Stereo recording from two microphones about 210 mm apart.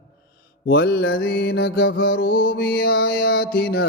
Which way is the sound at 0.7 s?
55° left (ahead or behind).